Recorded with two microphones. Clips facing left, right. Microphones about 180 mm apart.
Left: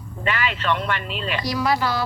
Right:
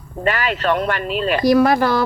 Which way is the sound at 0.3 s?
45° right (ahead or behind).